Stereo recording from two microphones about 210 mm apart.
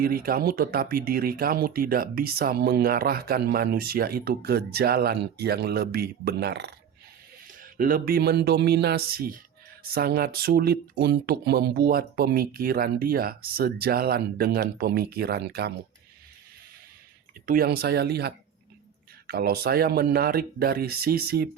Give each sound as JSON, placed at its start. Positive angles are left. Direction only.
{"t": 0.0, "sound": "speech", "side_deg": -45}
{"t": 7.4, "sound": "speech", "side_deg": -40}
{"t": 17.4, "sound": "speech", "side_deg": -45}